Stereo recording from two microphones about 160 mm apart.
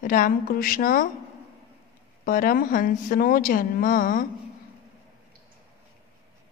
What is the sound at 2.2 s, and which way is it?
A woman's voice, 60° left (ahead or behind).